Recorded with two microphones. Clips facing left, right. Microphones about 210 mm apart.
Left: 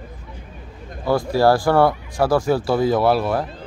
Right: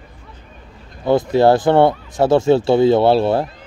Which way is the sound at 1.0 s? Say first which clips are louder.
Right 4 dB; 20° right (ahead or behind).